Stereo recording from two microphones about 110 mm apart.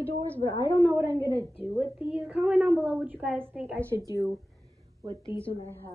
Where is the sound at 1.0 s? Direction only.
30° right (ahead or behind).